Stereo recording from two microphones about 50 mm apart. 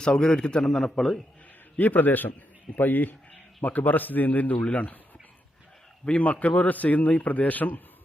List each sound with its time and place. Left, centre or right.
0.0 s a man's voice: centre
0.6 s a man's voice: centre
1.7 s a man's voice: left
6.1 s a man's voice: left